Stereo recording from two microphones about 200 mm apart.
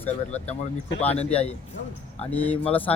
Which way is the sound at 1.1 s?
30° left (ahead or behind).